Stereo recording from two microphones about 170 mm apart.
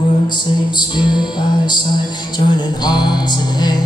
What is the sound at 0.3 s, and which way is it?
Music, 25° left (ahead or behind).